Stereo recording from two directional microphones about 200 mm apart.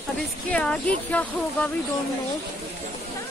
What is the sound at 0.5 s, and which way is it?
Speech, 5° left (ahead or behind).